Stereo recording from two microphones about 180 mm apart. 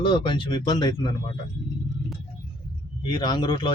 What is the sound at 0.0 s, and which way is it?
Speech, 25° left (ahead or behind).